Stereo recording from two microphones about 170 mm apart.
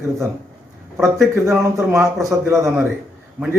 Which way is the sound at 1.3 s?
15° right (ahead or behind).